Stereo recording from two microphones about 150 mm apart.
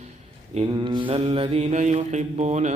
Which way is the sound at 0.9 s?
35° right (ahead or behind).